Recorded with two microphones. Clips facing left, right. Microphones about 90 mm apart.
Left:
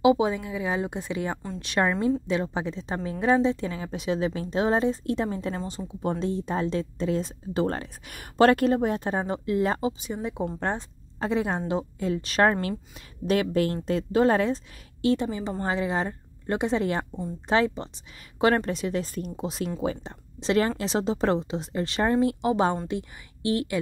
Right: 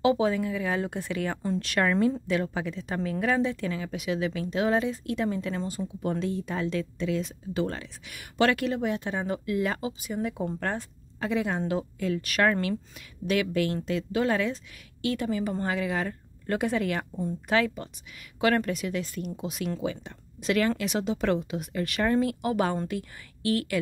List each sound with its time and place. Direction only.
0.0 s a woman's voice: 15° left (ahead or behind)